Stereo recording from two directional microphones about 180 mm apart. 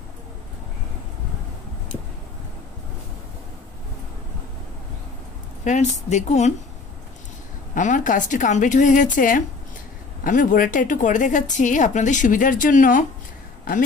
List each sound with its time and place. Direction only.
5.6 s a woman's voice: 40° left (ahead or behind)
7.7 s a woman's voice: 45° left (ahead or behind)